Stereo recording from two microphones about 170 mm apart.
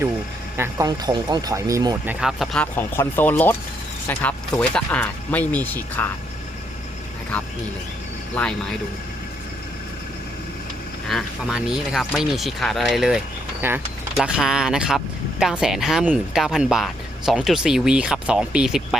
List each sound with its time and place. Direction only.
0.5 s speech: 15° right (ahead or behind)
2.0 s speech: centre (ahead or behind)
8.4 s speech: 5° left (ahead or behind)
11.1 s speech: 5° right (ahead or behind)